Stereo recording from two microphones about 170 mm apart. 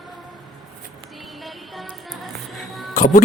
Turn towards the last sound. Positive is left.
turn(degrees=50)  # may be behind; listen again after turning